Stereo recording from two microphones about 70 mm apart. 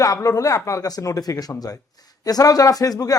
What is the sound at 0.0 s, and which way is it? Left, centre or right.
Speech, left.